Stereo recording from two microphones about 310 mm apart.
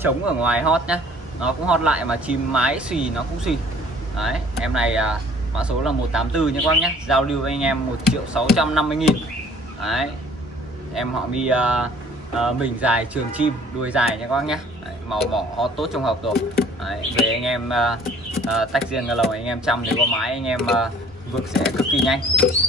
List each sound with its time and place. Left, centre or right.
0.0 s speech: centre